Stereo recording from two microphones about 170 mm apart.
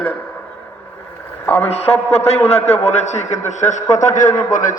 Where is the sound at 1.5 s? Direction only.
35° left (ahead or behind).